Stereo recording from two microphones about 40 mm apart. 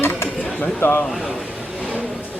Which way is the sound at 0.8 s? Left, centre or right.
Left.